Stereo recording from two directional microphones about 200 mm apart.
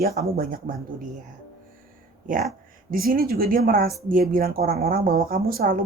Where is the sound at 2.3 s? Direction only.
40° right (ahead or behind).